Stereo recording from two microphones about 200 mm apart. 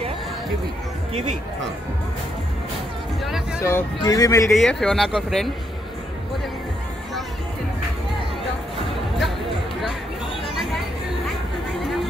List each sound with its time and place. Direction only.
3.6 s speech: 15° left (ahead or behind)
4.5 s speech: centre (ahead or behind)
11.8 s a sound: centre (ahead or behind)